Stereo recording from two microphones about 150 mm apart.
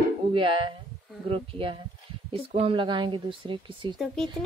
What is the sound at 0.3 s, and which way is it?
Speech, 35° right (ahead or behind).